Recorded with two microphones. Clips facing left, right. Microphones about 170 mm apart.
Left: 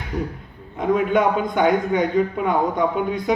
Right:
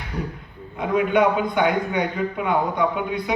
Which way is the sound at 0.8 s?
45° left (ahead or behind).